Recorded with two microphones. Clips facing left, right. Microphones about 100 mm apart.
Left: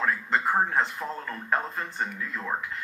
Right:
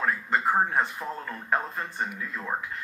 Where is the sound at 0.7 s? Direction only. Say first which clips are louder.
Even; 15° right (ahead or behind).